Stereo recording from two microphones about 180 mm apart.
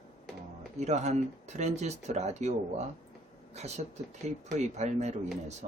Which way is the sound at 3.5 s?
40° right (ahead or behind).